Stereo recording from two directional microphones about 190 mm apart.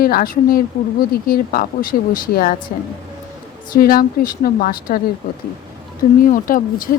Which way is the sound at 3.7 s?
50° left (ahead or behind).